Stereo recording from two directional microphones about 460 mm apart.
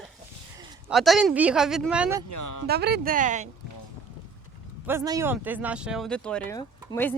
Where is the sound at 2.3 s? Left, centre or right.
Left.